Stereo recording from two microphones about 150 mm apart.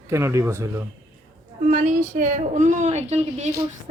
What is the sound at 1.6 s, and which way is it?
A woman's voice, 55° right (ahead or behind).